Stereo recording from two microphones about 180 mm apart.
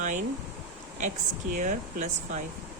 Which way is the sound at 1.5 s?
45° right (ahead or behind).